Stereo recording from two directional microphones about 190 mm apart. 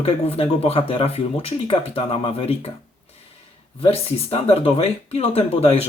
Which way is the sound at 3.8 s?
30° left (ahead or behind).